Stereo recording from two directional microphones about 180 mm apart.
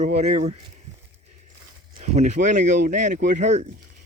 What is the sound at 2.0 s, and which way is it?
Speech, 40° right (ahead or behind).